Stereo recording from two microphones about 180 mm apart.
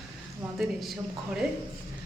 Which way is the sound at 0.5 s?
Centre (ahead or behind).